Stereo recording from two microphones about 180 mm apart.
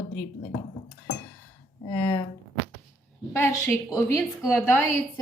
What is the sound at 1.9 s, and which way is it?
Speech, 20° left (ahead or behind).